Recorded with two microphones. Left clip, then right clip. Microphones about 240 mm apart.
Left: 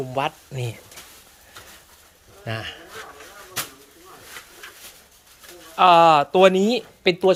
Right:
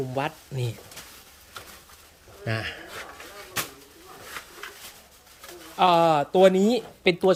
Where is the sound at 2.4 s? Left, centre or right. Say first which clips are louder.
Even; centre.